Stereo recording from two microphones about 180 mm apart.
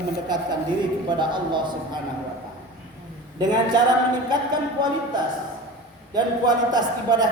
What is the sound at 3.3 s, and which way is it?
Speech, 25° right (ahead or behind).